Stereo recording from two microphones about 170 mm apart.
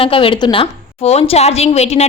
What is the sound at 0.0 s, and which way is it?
Speech, 30° left (ahead or behind).